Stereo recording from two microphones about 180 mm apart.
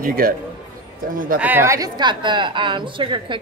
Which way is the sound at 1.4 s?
10° right (ahead or behind).